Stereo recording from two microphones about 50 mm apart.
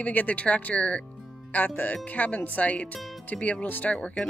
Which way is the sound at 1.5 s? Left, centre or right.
Left.